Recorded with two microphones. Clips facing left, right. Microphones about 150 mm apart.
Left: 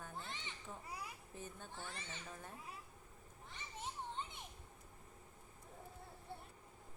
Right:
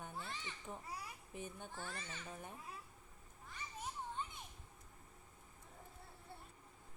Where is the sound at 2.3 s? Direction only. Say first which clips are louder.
Right 2 dB; 15° right (ahead or behind).